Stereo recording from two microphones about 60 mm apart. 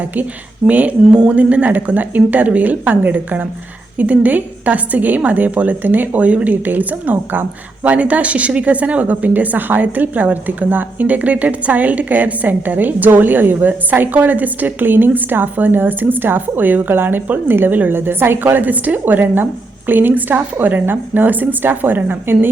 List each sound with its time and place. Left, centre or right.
0.7 s a woman's voice: right